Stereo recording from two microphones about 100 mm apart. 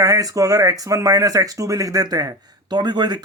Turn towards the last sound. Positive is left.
turn(degrees=-45)  # may be behind; listen again after turning